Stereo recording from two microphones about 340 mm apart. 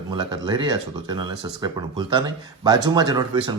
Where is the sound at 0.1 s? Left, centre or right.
Centre.